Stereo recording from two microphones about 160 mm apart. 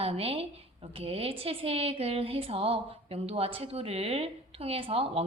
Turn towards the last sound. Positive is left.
turn(degrees=-35)  # may be behind; listen again after turning